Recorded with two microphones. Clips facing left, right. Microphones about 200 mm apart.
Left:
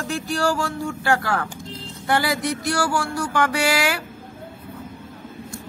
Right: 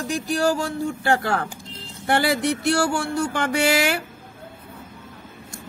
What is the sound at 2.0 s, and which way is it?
Female singing, 30° right (ahead or behind).